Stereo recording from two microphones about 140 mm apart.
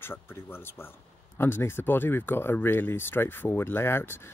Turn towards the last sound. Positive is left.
turn(degrees=15)  # may be behind; listen again after turning